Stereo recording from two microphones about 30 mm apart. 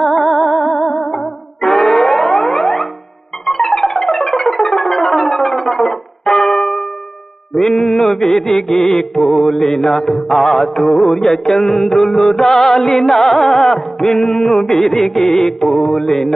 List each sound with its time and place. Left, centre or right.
0.0 s music: centre
4.4 s music: centre
5.7 s music: centre
9.1 s mantra: centre
10.2 s music: centre